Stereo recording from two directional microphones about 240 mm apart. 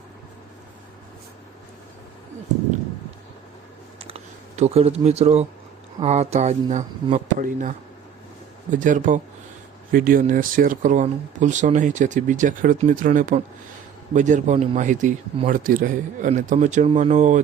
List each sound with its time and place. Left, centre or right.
3.9 s computer keyboard: right
6.0 s speech: right